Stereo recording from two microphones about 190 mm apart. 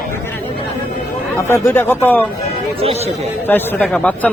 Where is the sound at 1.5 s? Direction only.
15° left (ahead or behind).